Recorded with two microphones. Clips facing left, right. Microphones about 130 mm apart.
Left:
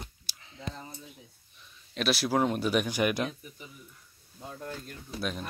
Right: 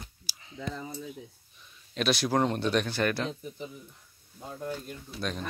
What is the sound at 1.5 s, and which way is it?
Speech, centre (ahead or behind).